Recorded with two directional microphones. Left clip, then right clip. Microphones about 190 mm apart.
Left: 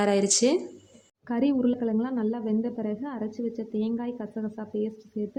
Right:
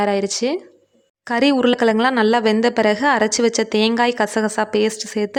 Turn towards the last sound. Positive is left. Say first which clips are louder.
# right 13 dB
turn(degrees=-40)  # may be behind; listen again after turning